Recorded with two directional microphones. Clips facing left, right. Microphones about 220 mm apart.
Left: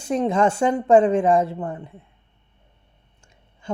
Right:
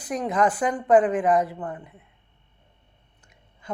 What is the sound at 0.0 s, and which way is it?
Speech, 25° left (ahead or behind).